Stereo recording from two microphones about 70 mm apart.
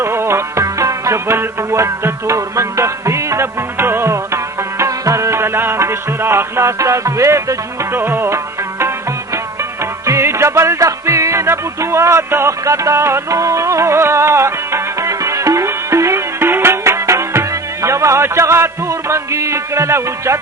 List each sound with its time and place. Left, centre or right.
0.0 s music: right
0.6 s music: right
7.9 s music: right
10.1 s music: right